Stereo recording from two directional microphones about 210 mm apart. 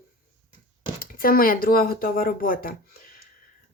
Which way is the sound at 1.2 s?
45° left (ahead or behind).